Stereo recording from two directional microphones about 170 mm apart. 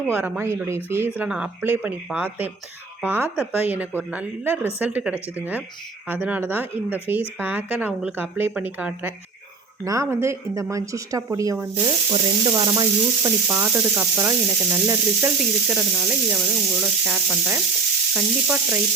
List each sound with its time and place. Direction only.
0.1 s sizzle: 10° right (ahead or behind)
11.8 s sizzle: 25° right (ahead or behind)
13.5 s sizzle: 10° right (ahead or behind)
18.1 s frying: 5° right (ahead or behind)